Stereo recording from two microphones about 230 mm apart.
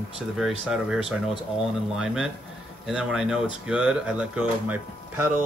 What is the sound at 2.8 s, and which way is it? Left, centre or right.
Speech, centre.